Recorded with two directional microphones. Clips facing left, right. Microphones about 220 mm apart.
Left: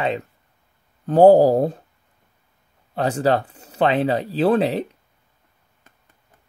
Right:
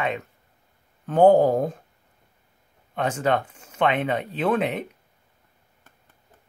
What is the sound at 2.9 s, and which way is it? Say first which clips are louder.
Speech: left 4 dB; 35° left (ahead or behind).